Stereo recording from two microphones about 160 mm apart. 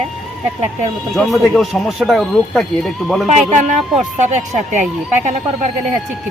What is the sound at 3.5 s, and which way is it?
Speech, 50° right (ahead or behind).